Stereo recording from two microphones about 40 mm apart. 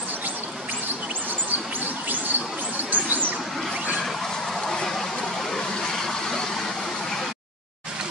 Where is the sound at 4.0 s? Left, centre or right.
Centre.